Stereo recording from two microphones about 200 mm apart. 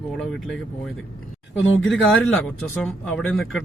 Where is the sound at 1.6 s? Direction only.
75° left (ahead or behind).